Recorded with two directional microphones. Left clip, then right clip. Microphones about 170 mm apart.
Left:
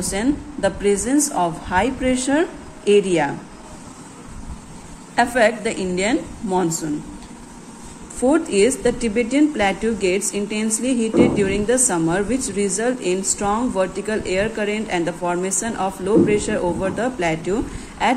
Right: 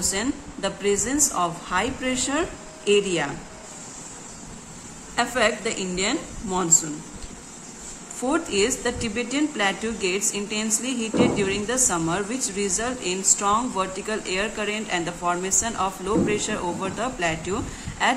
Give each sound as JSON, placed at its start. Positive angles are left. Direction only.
{"t": 0.0, "sound": "a woman's voice", "side_deg": 15}
{"t": 5.1, "sound": "a woman's voice", "side_deg": 20}
{"t": 8.2, "sound": "a woman's voice", "side_deg": 15}